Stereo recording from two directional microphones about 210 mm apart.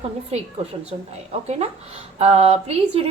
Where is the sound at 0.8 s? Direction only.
30° right (ahead or behind).